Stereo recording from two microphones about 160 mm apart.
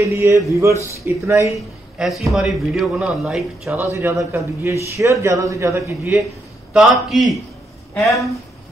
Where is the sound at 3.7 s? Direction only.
15° right (ahead or behind).